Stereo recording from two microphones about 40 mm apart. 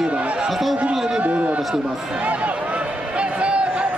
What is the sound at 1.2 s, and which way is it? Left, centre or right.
Speech, right.